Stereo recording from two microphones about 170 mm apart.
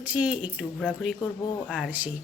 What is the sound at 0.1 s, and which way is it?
A woman's voice, 5° right (ahead or behind).